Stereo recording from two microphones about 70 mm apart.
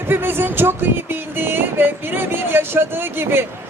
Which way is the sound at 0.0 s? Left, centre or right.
Right.